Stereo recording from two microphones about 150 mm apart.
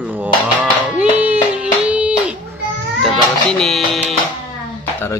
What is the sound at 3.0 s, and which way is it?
Music, centre (ahead or behind).